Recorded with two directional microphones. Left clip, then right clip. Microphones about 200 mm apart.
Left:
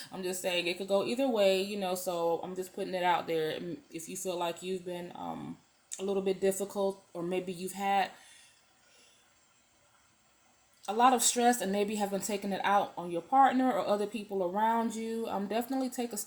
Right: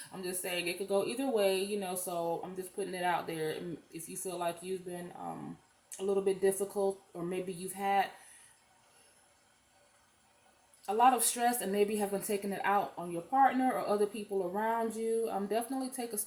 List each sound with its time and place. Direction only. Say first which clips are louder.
0.1 s a woman's voice: left 5 dB; 40° left (ahead or behind)
6.1 s a woman's voice: even; 45° left (ahead or behind)
10.8 s a woman's voice: left 1 dB; 45° left (ahead or behind)